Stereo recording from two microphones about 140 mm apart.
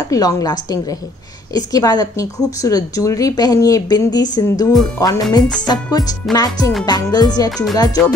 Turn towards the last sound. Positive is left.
turn(degrees=25)  # may be behind; listen again after turning